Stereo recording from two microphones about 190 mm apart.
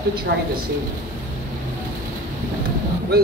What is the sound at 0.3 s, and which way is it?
Speech, 60° right (ahead or behind).